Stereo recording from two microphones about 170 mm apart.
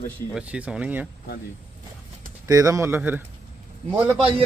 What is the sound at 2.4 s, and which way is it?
Speech, 20° right (ahead or behind).